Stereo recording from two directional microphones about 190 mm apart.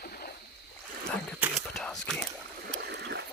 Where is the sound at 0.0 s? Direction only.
50° left (ahead or behind).